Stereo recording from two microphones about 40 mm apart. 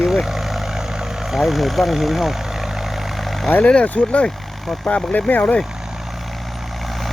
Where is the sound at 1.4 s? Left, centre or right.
Centre.